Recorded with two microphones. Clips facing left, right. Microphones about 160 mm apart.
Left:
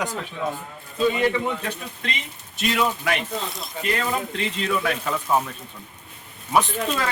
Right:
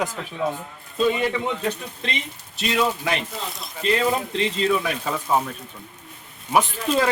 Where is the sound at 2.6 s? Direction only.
25° right (ahead or behind).